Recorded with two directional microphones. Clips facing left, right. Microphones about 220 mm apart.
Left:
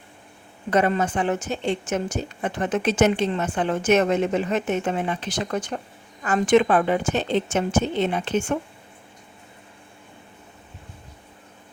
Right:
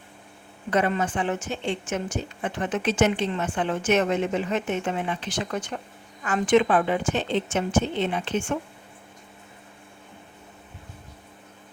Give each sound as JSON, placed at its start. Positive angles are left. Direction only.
{"t": 0.7, "sound": "a woman's voice", "side_deg": 40}